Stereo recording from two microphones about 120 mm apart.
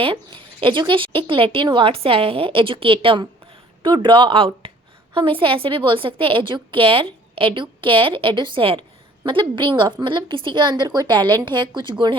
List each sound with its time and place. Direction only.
0.0 s a woman's voice: 45° right (ahead or behind)